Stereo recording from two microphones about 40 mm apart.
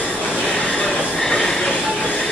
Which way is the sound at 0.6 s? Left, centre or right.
Left.